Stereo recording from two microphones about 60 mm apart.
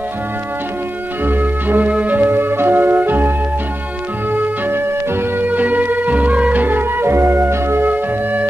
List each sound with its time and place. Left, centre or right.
1.2 s music: right
7.9 s music: right